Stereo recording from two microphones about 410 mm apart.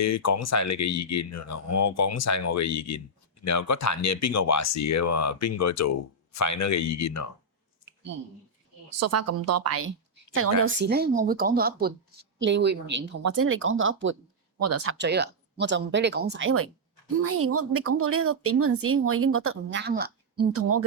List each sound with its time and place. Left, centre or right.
0.0 s speech: left
8.9 s speech: right
10.6 s speech: right
20.4 s speech: right